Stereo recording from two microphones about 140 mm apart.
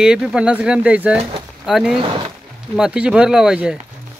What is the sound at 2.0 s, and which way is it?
Speech, 35° right (ahead or behind).